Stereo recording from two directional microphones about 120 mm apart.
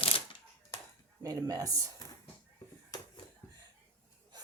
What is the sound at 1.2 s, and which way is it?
Speech, 30° right (ahead or behind).